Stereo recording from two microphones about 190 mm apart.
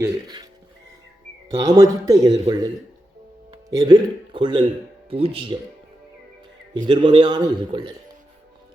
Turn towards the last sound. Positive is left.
turn(degrees=-25)  # may be behind; listen again after turning